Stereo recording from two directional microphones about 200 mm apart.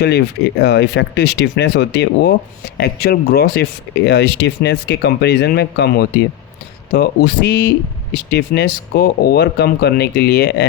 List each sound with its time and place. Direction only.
0.6 s speech: 60° left (ahead or behind)